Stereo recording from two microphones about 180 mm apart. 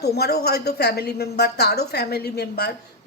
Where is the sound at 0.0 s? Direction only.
65° left (ahead or behind).